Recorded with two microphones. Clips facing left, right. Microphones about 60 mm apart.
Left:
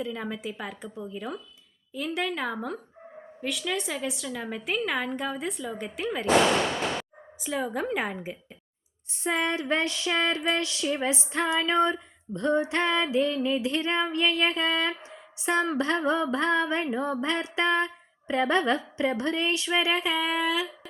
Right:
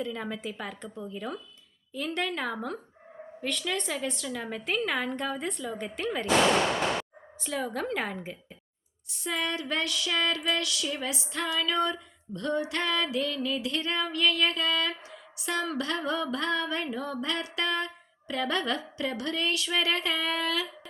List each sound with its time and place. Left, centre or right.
0.0 s a woman's voice: centre
9.0 s female singing: left; by 20.7 s centre